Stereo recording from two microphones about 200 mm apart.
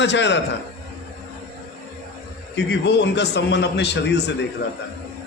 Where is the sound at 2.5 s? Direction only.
60° left (ahead or behind).